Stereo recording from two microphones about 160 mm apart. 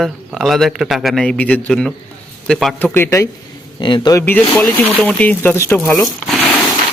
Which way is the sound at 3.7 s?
25° left (ahead or behind).